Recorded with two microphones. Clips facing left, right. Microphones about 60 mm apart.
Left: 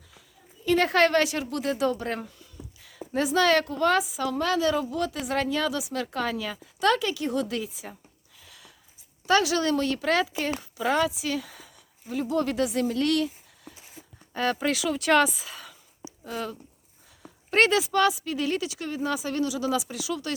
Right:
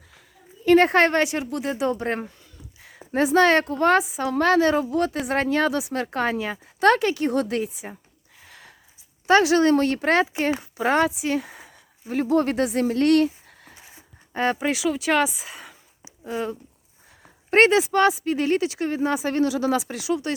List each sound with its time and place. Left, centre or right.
0.6 s a woman's voice: right
2.0 s speech: right
4.4 s speech: right
8.4 s a sound: right
9.2 s speech: right
14.3 s a woman's voice: right
14.6 s speech: centre
15.4 s a woman's voice: right
17.5 s speech: right